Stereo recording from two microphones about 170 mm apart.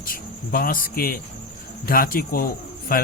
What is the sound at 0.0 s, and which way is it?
A man's voice, 55° left (ahead or behind).